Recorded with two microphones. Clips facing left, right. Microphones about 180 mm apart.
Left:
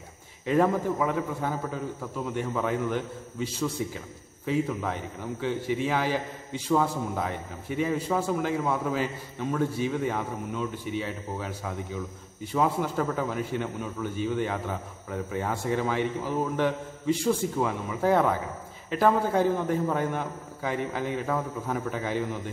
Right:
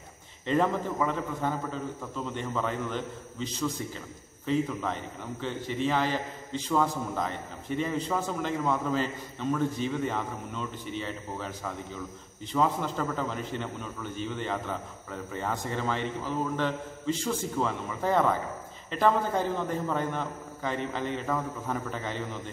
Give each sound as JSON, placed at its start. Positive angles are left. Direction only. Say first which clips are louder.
{"t": 0.5, "sound": "a man's voice", "louder": "left 3 dB", "side_deg": 10}